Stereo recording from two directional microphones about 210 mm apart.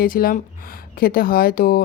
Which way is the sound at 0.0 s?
45° left (ahead or behind).